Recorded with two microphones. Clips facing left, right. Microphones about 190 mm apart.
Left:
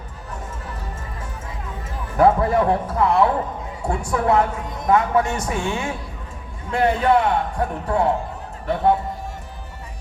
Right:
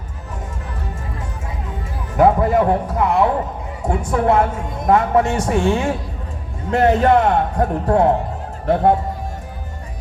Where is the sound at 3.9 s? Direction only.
25° right (ahead or behind); by 8.9 s 50° right (ahead or behind).